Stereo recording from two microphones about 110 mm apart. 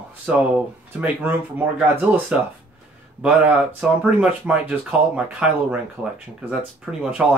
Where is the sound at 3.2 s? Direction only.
10° right (ahead or behind).